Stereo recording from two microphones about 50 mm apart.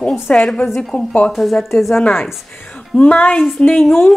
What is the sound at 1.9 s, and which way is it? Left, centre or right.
Speech, left.